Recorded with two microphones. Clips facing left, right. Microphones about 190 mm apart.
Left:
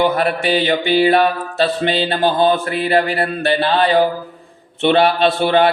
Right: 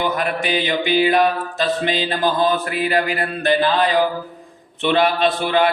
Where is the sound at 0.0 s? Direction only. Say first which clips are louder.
Left 5 dB; 35° left (ahead or behind).